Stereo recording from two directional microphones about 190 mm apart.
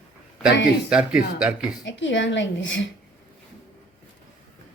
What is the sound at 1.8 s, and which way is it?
A woman's voice, 75° left (ahead or behind).